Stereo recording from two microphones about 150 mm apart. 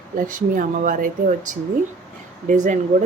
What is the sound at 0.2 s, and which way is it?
Speech, 65° right (ahead or behind).